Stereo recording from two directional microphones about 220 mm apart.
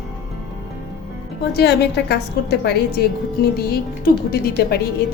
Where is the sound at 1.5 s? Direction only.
50° left (ahead or behind).